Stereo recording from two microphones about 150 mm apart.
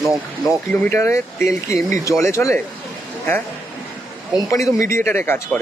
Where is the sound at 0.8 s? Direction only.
15° left (ahead or behind).